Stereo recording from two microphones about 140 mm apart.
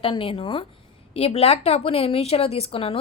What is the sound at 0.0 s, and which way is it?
A woman's voice, 40° left (ahead or behind).